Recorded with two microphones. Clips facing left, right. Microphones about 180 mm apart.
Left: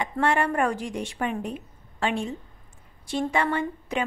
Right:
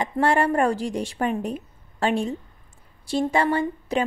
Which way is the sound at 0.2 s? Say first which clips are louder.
Right 3 dB; 35° right (ahead or behind).